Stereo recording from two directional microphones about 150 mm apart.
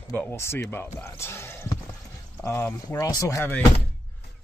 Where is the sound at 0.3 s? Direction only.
15° left (ahead or behind).